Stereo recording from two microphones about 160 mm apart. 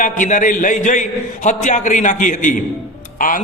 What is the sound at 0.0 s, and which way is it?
A man's voice, 55° left (ahead or behind).